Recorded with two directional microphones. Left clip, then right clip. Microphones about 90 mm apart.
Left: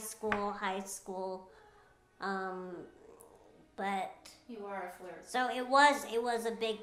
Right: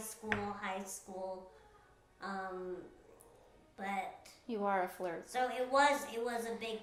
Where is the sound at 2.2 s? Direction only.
35° left (ahead or behind).